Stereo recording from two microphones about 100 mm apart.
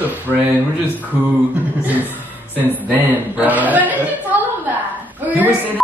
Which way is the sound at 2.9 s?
15° right (ahead or behind).